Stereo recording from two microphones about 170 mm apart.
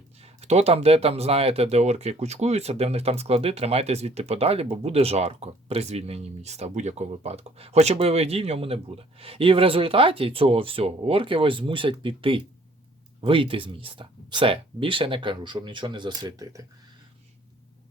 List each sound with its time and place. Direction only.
0.2 s speech: 40° right (ahead or behind); by 16.6 s 20° right (ahead or behind)